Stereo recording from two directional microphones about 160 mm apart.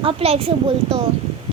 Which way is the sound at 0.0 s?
35° right (ahead or behind).